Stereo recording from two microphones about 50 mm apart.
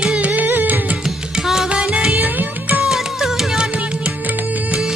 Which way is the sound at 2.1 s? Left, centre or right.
Right.